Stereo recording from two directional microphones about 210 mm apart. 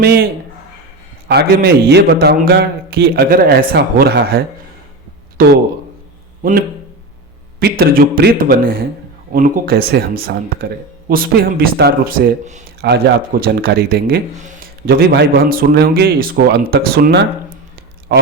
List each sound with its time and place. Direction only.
0.0 s a man's voice: 45° right (ahead or behind)
1.3 s a man's voice: 50° right (ahead or behind)
5.4 s a man's voice: 45° right (ahead or behind)
7.6 s a man's voice: 45° right (ahead or behind)
12.8 s a man's voice: 50° right (ahead or behind)